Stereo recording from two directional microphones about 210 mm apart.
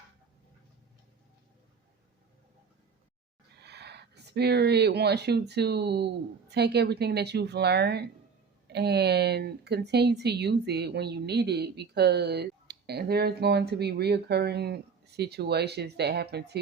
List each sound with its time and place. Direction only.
3.6 s speech: 50° right (ahead or behind)